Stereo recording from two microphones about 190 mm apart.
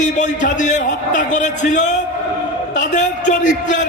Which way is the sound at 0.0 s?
40° left (ahead or behind).